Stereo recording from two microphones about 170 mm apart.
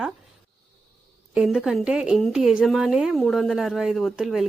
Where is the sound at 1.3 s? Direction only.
5° right (ahead or behind).